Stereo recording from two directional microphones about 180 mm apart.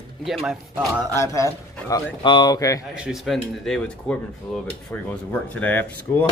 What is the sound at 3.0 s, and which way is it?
Speech, centre (ahead or behind).